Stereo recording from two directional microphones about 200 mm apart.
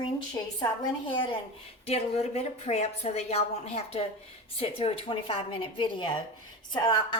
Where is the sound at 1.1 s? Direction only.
25° left (ahead or behind).